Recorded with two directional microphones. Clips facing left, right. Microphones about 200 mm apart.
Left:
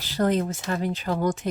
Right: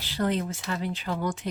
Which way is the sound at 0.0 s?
45° left (ahead or behind).